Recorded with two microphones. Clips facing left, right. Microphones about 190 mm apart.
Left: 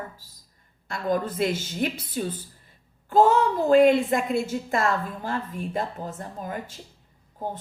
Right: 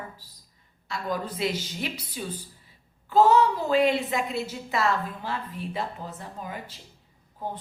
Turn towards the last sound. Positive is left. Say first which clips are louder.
# left 4 dB
turn(degrees=50)  # may be behind; listen again after turning